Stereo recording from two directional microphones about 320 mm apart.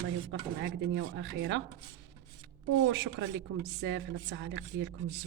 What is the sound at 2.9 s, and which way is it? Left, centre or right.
Speech, right.